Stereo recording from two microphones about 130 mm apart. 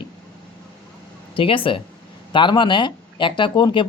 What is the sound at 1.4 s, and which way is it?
Speech, 40° left (ahead or behind).